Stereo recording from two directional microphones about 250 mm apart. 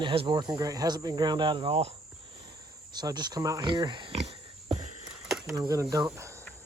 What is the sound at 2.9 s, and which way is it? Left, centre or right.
Pig, centre.